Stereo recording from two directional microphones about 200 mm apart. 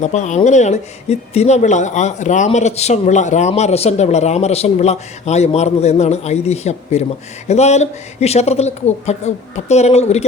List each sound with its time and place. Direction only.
0.0 s speech: 35° left (ahead or behind)